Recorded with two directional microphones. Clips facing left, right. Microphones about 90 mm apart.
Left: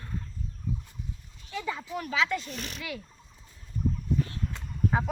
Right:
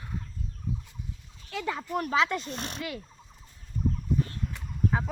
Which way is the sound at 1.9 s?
45° right (ahead or behind).